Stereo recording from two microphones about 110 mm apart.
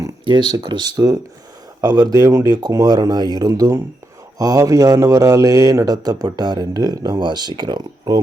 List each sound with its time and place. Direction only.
0.5 s speech: 40° right (ahead or behind)